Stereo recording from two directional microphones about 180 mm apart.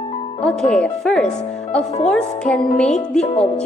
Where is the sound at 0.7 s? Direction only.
5° left (ahead or behind).